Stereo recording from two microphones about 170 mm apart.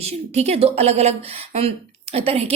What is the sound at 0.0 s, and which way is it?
Speech, 40° right (ahead or behind).